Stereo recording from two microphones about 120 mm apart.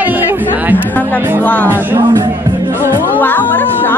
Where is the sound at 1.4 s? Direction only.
15° left (ahead or behind).